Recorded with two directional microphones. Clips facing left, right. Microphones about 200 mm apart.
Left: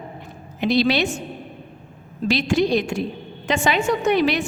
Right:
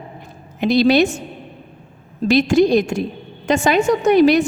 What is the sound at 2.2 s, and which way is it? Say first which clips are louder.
A woman's voice: right 6 dB; 45° right (ahead or behind).